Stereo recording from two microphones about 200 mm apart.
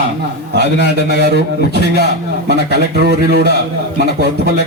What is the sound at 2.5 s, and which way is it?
Speech, 55° right (ahead or behind).